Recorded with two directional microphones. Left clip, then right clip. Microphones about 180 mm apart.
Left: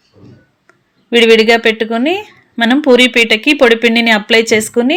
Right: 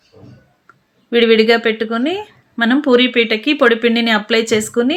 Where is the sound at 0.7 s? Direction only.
25° left (ahead or behind).